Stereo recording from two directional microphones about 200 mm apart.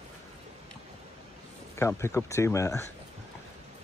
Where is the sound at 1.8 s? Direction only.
15° left (ahead or behind).